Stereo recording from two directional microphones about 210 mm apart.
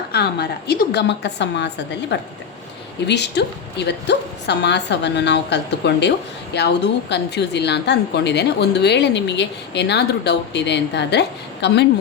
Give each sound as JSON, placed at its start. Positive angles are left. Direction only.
{"t": 0.1, "sound": "a woman's voice", "side_deg": 50}